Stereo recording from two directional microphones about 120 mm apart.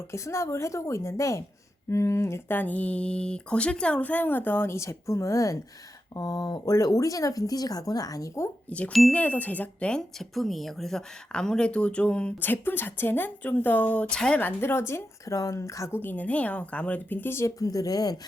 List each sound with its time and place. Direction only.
0.1 s speech: 25° left (ahead or behind)
8.9 s speech: centre (ahead or behind)
9.1 s speech: 15° left (ahead or behind); by 18.2 s 30° left (ahead or behind)